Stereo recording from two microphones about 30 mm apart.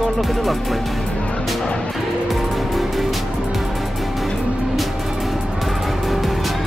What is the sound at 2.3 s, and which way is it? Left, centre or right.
Music, centre.